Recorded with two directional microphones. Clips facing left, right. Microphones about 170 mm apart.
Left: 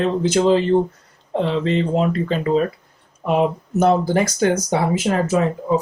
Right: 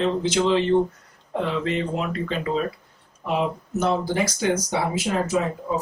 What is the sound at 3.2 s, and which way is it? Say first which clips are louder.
Speech: left 6 dB; 50° left (ahead or behind).